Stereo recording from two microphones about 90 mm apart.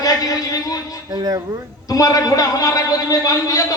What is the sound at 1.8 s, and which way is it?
A man's voice, 40° left (ahead or behind).